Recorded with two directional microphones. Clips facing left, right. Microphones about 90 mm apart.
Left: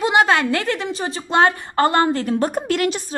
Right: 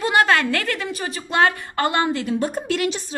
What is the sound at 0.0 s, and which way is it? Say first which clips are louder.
A woman's voice: left 2 dB; 20° left (ahead or behind).